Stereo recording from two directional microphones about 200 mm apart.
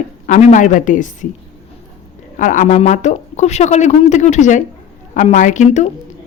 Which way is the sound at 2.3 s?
40° left (ahead or behind).